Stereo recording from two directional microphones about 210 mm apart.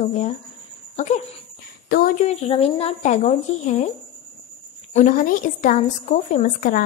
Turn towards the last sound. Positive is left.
turn(degrees=40)  # may be behind; listen again after turning